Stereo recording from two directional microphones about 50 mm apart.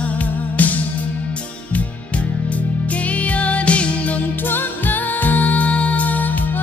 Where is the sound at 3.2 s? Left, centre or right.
Left.